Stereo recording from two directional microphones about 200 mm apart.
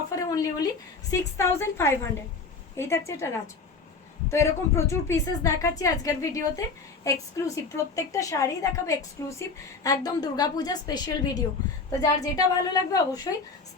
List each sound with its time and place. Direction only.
0.2 s a woman's voice: 15° left (ahead or behind)